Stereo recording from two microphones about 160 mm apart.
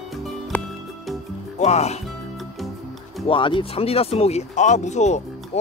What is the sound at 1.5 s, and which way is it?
Speech, 45° left (ahead or behind).